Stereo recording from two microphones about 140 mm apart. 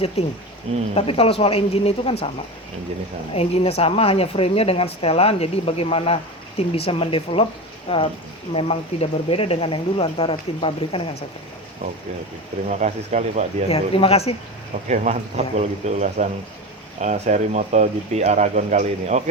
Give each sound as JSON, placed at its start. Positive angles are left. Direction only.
{"t": 0.2, "sound": "speech", "side_deg": 45}
{"t": 3.3, "sound": "speech", "side_deg": 45}
{"t": 12.6, "sound": "speech", "side_deg": -55}
{"t": 13.7, "sound": "speech", "side_deg": 45}
{"t": 14.8, "sound": "speech", "side_deg": -55}